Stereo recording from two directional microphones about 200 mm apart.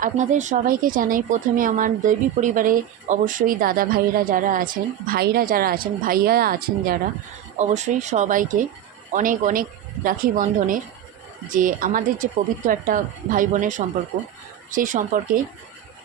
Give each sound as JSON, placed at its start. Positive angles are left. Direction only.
{"t": 0.0, "sound": "speech", "side_deg": -40}
{"t": 7.6, "sound": "speech", "side_deg": -35}